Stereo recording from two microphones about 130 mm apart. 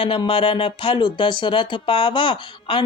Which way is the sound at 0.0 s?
40° left (ahead or behind).